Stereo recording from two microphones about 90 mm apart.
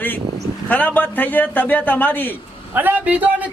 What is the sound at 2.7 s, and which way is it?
Speech, 20° right (ahead or behind).